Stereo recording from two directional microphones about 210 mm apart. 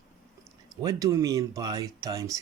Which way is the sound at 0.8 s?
15° right (ahead or behind).